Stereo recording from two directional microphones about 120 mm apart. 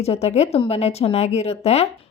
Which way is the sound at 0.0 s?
60° left (ahead or behind).